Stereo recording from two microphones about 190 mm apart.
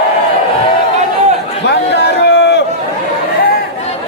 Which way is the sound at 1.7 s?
60° left (ahead or behind).